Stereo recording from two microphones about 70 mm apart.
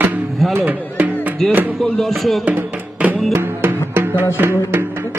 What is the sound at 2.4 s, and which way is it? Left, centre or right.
Music, right.